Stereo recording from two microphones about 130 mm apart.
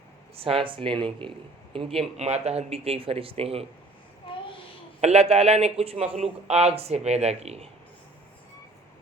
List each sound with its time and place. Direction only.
0.3 s speech: 45° right (ahead or behind)
2.1 s speech: 55° right (ahead or behind)
4.9 s speech: 55° right (ahead or behind)